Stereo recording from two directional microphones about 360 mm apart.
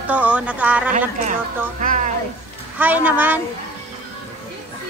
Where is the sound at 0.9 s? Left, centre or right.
Right.